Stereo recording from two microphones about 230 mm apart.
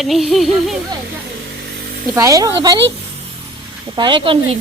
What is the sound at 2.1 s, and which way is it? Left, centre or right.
Speech, centre.